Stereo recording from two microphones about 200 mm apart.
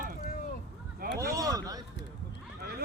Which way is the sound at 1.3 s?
15° right (ahead or behind).